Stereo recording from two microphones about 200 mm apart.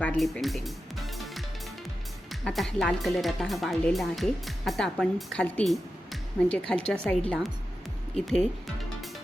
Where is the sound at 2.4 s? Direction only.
Centre (ahead or behind).